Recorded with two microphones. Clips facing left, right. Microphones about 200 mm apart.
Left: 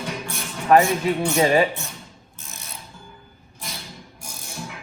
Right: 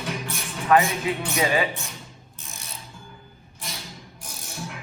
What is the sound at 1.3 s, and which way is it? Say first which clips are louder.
Speech: left 5 dB; 40° left (ahead or behind).